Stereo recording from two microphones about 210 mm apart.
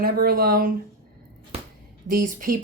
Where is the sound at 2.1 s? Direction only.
40° right (ahead or behind).